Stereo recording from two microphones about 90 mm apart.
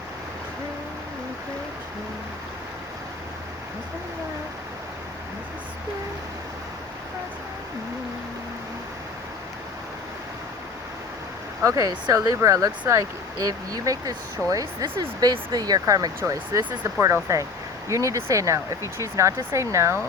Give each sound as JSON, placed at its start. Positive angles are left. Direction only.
{"t": 11.6, "sound": "speech", "side_deg": -40}